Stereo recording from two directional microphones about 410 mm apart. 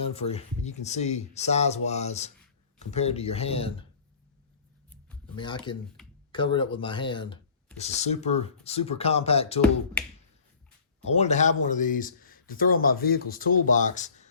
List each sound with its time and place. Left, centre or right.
0.3 s speech: centre
5.0 s a sound: centre
6.3 s speech: centre
11.1 s speech: centre